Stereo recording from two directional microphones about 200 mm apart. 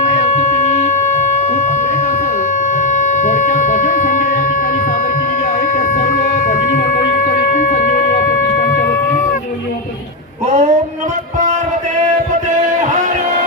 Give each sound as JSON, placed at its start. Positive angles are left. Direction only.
{"t": 2.7, "sound": "a sound", "side_deg": 40}
{"t": 5.9, "sound": "music", "side_deg": 40}
{"t": 7.5, "sound": "shofar", "side_deg": 40}
{"t": 10.4, "sound": "female singing", "side_deg": -35}